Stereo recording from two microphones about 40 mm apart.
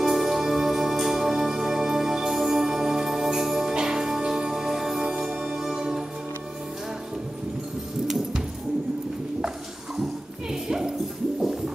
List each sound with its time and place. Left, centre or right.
0.0 s music: centre
10.5 s bow-wow: centre
11.3 s music: centre